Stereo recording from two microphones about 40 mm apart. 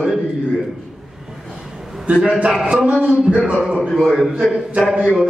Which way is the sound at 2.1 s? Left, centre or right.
Right.